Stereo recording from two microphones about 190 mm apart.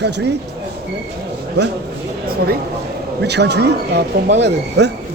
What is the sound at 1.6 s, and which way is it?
Speech, 65° right (ahead or behind).